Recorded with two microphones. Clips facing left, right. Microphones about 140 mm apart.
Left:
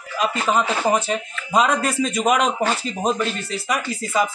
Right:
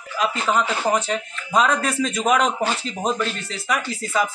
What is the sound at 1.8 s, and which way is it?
Speech, centre (ahead or behind).